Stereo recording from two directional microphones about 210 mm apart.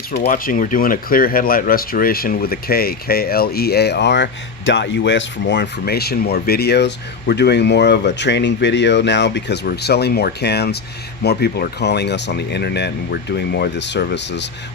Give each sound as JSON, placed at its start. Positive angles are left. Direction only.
{"t": 0.1, "sound": "speech", "side_deg": 50}